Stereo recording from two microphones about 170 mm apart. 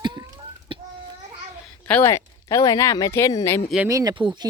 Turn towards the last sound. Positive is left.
turn(degrees=-25)  # may be behind; listen again after turning